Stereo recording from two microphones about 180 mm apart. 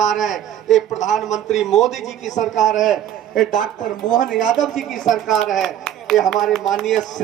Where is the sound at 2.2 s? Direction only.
40° left (ahead or behind).